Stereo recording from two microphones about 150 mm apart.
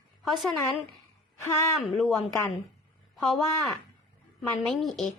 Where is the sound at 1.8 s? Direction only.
Centre (ahead or behind).